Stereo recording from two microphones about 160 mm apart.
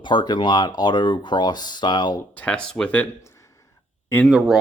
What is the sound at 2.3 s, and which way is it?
Speech, 10° left (ahead or behind).